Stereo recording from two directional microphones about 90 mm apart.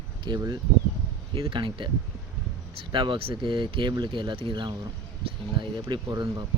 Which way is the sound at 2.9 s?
65° right (ahead or behind).